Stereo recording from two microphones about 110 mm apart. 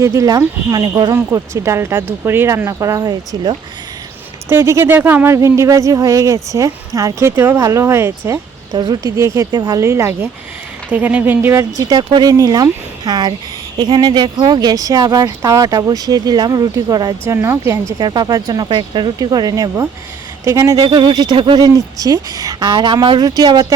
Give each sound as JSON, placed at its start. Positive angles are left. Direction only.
{"t": 0.0, "sound": "speech", "side_deg": -30}
{"t": 1.1, "sound": "speech", "side_deg": -25}
{"t": 4.4, "sound": "speech", "side_deg": -25}
{"t": 8.7, "sound": "speech", "side_deg": -35}
{"t": 9.8, "sound": "speech", "side_deg": -25}
{"t": 11.8, "sound": "speech", "side_deg": -45}
{"t": 17.2, "sound": "speech", "side_deg": -20}
{"t": 18.0, "sound": "speech", "side_deg": -40}
{"t": 20.4, "sound": "speech", "side_deg": -25}
{"t": 20.8, "sound": "speech", "side_deg": -45}